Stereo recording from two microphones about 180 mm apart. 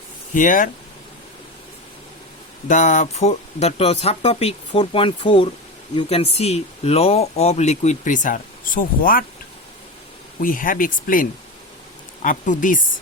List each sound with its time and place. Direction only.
0.3 s speech: 45° left (ahead or behind)
2.6 s speech: 45° left (ahead or behind)
10.4 s speech: 50° left (ahead or behind)